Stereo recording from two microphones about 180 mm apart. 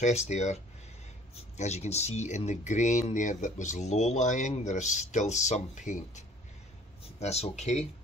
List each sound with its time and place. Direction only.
0.0 s speech: 40° left (ahead or behind)